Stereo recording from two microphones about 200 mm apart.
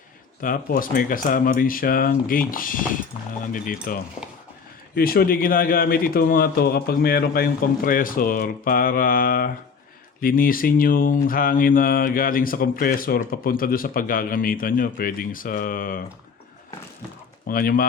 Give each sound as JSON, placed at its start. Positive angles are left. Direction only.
{"t": 0.4, "sound": "speech", "side_deg": 45}
{"t": 17.4, "sound": "speech", "side_deg": 45}